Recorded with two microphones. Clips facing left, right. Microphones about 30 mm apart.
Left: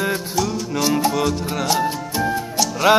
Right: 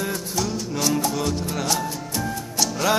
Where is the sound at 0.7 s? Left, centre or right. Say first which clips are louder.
Left 4 dB; centre.